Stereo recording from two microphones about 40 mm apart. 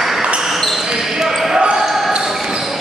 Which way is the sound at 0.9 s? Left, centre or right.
Centre.